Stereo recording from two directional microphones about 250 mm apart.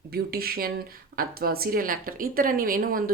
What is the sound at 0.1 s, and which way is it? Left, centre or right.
Speech, right.